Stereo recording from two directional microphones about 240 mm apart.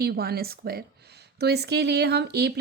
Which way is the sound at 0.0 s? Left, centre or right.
Right.